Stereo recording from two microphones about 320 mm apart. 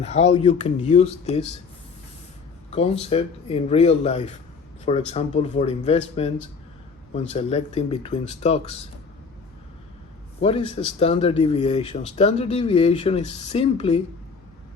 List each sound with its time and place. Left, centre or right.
0.0 s speech: centre
2.6 s speech: centre
10.4 s speech: centre